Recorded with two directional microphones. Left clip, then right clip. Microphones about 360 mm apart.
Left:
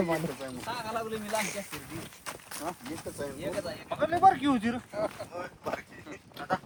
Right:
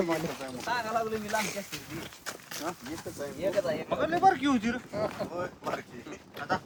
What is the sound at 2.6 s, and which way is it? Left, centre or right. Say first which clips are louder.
Speech: even; left.